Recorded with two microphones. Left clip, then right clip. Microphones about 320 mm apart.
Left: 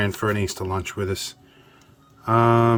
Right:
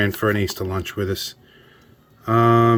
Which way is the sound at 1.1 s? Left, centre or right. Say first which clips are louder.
Right 2 dB; left.